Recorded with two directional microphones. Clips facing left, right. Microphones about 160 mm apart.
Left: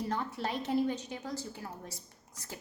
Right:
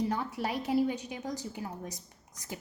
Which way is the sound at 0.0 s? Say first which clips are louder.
Right 3 dB; 10° right (ahead or behind).